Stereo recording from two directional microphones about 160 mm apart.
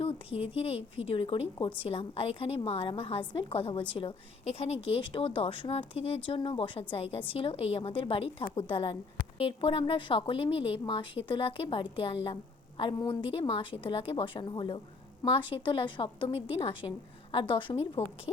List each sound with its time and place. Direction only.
0.4 s speech: 35° left (ahead or behind)